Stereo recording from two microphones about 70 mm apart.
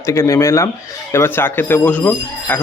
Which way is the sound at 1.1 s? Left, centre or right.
Left.